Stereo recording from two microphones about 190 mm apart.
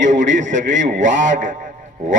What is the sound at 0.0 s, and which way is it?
Radio, 70° right (ahead or behind).